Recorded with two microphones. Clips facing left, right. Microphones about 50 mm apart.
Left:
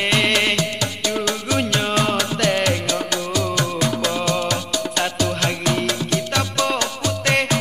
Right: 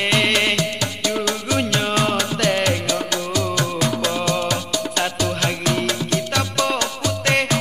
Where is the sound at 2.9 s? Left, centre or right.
Left.